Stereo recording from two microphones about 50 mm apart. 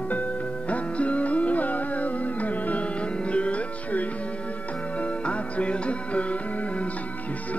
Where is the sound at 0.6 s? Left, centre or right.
Left.